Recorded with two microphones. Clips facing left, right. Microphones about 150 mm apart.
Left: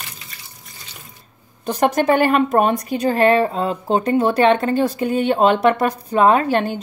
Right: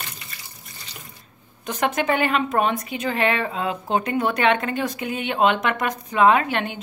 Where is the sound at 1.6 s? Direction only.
40° left (ahead or behind).